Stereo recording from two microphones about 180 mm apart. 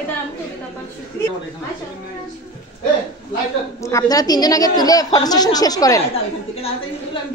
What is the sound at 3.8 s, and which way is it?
A woman's voice, 20° left (ahead or behind).